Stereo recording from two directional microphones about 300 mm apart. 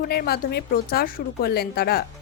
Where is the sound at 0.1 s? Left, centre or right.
Left.